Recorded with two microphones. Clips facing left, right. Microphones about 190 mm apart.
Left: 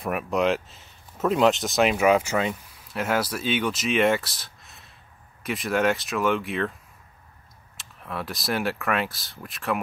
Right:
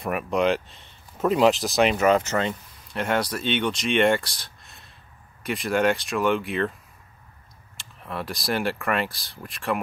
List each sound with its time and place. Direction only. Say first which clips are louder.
0.0 s speech: right 1 dB; centre (ahead or behind)
7.7 s speech: right 1 dB; centre (ahead or behind)